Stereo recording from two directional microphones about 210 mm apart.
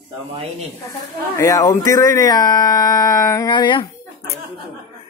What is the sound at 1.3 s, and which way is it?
Speech, 15° left (ahead or behind).